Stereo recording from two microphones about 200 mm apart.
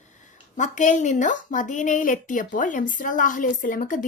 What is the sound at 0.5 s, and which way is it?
A woman's voice, 40° left (ahead or behind).